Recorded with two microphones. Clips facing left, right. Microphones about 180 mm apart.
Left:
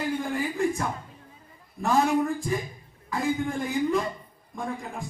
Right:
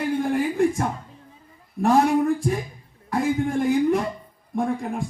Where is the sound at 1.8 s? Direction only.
60° right (ahead or behind).